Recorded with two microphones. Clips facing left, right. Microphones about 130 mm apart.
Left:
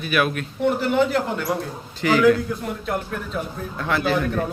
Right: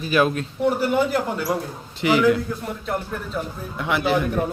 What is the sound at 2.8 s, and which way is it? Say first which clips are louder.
Speech: even; centre (ahead or behind).